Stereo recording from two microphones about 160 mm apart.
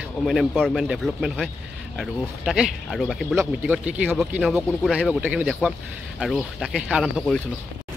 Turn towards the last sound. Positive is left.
turn(degrees=0)  # may be behind; listen again after turning